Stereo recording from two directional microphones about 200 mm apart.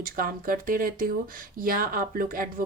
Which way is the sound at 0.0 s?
45° right (ahead or behind).